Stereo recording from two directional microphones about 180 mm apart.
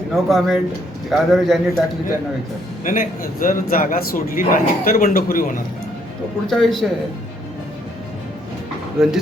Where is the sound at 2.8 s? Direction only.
50° left (ahead or behind).